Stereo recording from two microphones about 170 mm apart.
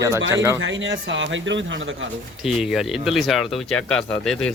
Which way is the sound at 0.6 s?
90° right.